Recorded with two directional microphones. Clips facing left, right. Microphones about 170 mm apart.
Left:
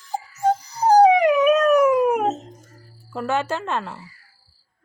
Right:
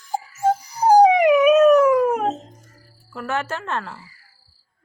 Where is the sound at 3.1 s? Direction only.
20° left (ahead or behind).